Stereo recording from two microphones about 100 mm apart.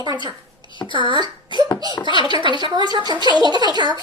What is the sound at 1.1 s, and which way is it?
A woman's voice, 50° right (ahead or behind).